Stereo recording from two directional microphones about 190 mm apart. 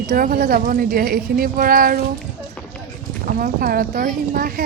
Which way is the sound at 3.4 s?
50° right (ahead or behind).